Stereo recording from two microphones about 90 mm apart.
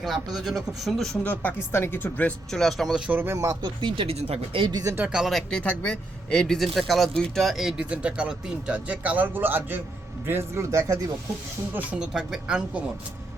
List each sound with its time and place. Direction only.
0.0 s a man's voice: centre (ahead or behind)
1.2 s speech: 20° left (ahead or behind)
2.5 s a man's voice: 5° left (ahead or behind)
3.1 s speech: 25° right (ahead or behind)
3.3 s speech: 40° right (ahead or behind)
3.6 s speech: 65° right (ahead or behind); by 4.7 s 85° right
4.7 s speech: 40° right (ahead or behind)
5.0 s a man's voice: 5° right (ahead or behind)
5.5 s a man's voice: 15° left (ahead or behind); by 11.0 s 35° right (ahead or behind)
11.7 s speech: 20° right (ahead or behind)